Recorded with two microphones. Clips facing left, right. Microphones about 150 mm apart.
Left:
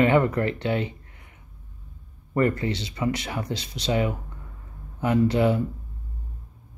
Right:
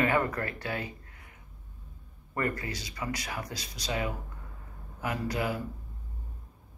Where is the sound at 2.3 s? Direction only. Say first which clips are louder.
Left 9 dB; 25° left (ahead or behind).